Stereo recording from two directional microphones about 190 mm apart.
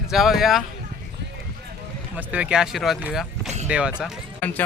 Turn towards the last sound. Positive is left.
turn(degrees=10)  # may be behind; listen again after turning